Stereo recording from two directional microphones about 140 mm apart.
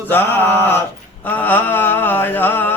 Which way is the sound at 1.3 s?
10° left (ahead or behind).